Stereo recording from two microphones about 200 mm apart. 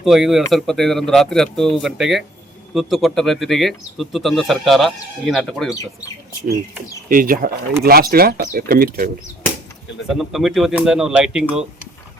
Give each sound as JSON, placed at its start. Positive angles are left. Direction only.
{"t": 0.0, "sound": "speech", "side_deg": 0}
{"t": 7.1, "sound": "speech", "side_deg": -45}
{"t": 10.2, "sound": "speech", "side_deg": 0}